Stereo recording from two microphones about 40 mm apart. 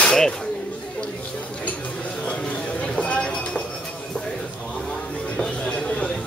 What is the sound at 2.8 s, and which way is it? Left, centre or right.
Chink, left.